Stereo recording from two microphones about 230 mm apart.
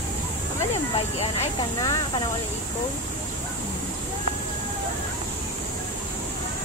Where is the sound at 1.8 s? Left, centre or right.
Centre.